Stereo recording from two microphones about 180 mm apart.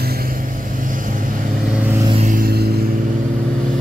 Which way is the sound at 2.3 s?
55° right (ahead or behind).